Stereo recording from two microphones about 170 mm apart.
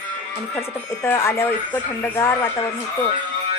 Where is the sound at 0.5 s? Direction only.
15° left (ahead or behind).